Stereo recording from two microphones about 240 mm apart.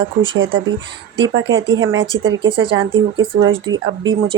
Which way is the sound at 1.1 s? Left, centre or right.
Right.